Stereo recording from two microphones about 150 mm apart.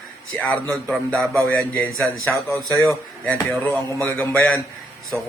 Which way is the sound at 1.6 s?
20° left (ahead or behind).